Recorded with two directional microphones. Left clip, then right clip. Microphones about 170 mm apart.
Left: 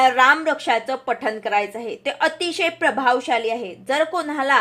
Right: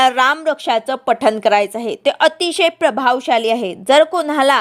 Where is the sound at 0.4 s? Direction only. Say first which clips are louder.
Right 4 dB; 50° right (ahead or behind).